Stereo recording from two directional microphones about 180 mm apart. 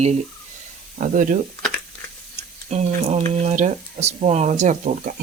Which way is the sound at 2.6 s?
40° right (ahead or behind).